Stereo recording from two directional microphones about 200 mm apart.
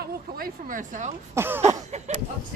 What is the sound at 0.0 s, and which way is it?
Speech, 50° right (ahead or behind).